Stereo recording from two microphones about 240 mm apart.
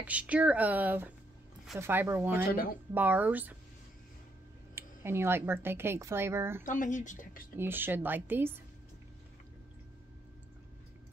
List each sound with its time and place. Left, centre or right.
0.0 s speech: centre
4.7 s speech: centre
6.6 s speech: left
7.5 s speech: centre